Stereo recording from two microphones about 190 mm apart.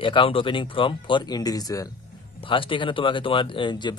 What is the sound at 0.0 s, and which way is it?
Speech, 25° left (ahead or behind).